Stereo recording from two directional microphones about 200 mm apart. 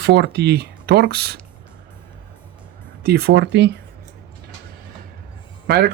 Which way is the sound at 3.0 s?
50° right (ahead or behind).